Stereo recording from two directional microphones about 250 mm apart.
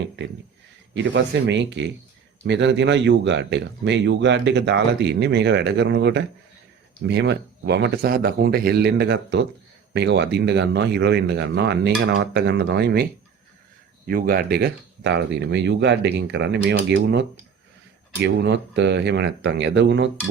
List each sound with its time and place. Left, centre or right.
0.9 s speech: right
14.1 s speech: right